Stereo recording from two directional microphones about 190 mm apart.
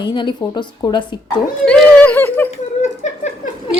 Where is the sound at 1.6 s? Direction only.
5° left (ahead or behind).